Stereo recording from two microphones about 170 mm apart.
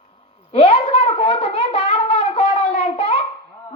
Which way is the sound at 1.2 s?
40° left (ahead or behind).